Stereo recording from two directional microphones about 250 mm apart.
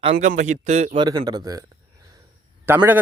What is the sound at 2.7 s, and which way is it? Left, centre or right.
Speech, centre.